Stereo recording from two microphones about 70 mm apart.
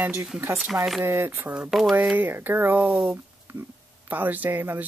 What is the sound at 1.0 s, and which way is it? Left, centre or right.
Speech, right.